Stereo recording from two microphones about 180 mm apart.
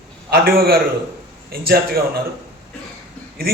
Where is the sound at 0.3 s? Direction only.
55° right (ahead or behind).